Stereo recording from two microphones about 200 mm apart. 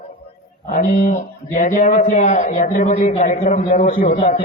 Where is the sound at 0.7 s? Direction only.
45° left (ahead or behind).